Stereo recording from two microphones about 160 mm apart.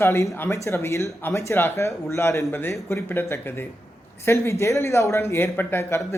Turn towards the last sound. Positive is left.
turn(degrees=15)  # may be behind; listen again after turning